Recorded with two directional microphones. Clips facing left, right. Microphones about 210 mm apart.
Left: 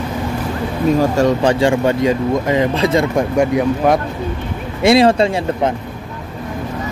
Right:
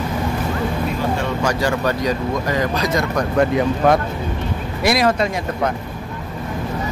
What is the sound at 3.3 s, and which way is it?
Speech, 10° left (ahead or behind).